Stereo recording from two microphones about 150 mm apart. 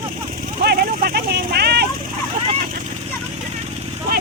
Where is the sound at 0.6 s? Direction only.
90° right.